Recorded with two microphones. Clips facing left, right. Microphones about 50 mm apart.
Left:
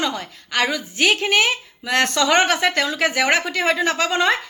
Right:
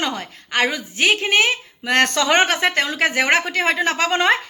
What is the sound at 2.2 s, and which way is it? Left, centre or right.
A woman's voice, right.